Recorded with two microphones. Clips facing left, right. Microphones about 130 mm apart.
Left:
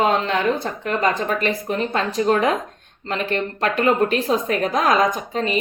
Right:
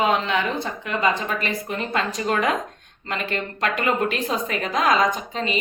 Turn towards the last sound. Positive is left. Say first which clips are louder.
# left 3 dB
turn(degrees=50)  # may be behind; listen again after turning